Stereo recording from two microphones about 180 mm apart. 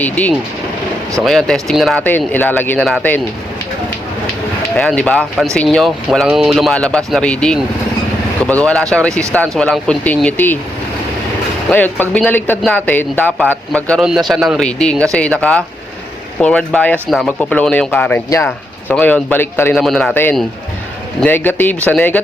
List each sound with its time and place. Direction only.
0.0 s speech: 10° left (ahead or behind)
4.7 s speech: 5° left (ahead or behind)
11.7 s speech: 10° left (ahead or behind)
19.7 s speech: centre (ahead or behind)